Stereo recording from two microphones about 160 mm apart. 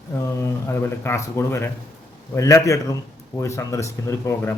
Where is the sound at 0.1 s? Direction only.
15° left (ahead or behind).